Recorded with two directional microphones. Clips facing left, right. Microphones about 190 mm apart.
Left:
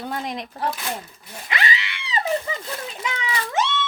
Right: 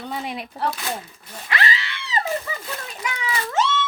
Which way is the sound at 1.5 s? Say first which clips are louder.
Right 1 dB; 20° left (ahead or behind).